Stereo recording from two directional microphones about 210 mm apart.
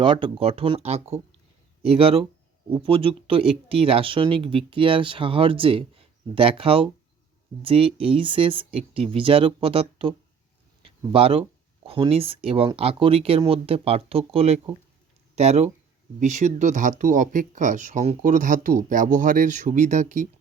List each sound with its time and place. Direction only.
0.0 s speech: 25° right (ahead or behind)